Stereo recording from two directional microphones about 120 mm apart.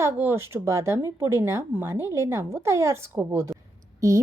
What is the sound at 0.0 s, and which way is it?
A woman's voice, 20° right (ahead or behind).